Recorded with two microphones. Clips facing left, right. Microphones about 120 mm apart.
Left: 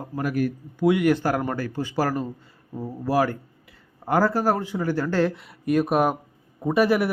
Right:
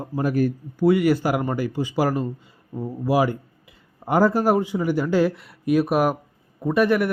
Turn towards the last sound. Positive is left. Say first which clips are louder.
# right 1 dB
turn(degrees=0)  # may be behind; listen again after turning